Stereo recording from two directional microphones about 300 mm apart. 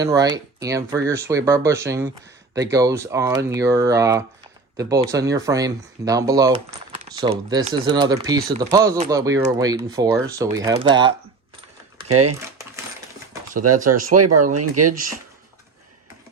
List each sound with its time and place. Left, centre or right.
0.0 s speech: centre
12.0 s speech: right
13.9 s speech: right